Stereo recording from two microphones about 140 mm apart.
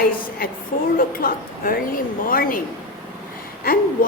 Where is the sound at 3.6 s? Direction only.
90° left.